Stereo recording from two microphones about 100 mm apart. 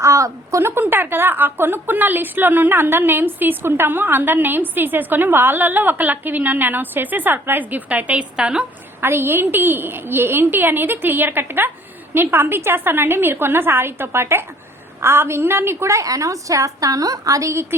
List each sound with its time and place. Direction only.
0.0 s a woman's voice: 30° right (ahead or behind); by 8.6 s 10° right (ahead or behind)
9.0 s a woman's voice: 25° right (ahead or behind)